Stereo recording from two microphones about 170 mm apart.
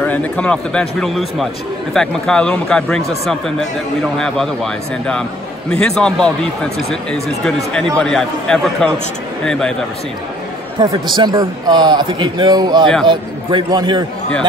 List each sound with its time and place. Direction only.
0.0 s speech: 10° left (ahead or behind)
11.1 s a man's voice: 25° right (ahead or behind)